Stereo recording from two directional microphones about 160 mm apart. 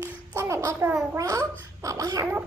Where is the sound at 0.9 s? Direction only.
5° right (ahead or behind).